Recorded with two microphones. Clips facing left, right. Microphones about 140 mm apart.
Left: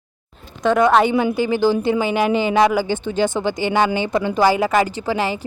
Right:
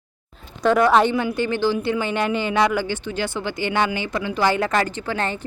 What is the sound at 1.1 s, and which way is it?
Speech, 25° left (ahead or behind).